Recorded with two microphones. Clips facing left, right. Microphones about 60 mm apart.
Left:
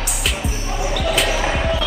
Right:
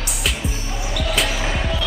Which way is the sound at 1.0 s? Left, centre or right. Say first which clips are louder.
Left 2 dB; centre.